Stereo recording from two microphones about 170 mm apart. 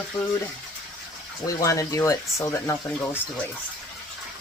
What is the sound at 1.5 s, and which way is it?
Speech, 20° left (ahead or behind).